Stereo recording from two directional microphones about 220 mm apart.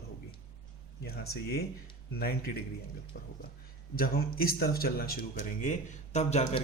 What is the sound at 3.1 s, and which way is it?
Speech, 45° left (ahead or behind).